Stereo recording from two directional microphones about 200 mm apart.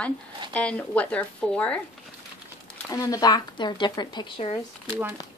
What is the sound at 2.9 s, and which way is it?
Speech, 15° left (ahead or behind).